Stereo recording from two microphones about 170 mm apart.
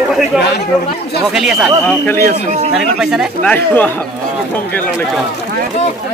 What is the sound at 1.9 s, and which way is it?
Speech, 10° left (ahead or behind).